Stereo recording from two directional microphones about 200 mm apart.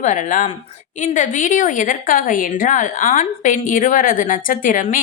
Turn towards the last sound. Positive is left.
turn(degrees=40)  # may be behind; listen again after turning